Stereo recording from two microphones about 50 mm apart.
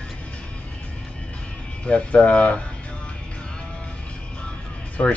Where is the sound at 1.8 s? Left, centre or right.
Left.